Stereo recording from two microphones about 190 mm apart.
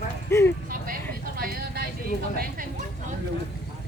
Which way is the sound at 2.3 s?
50° right (ahead or behind).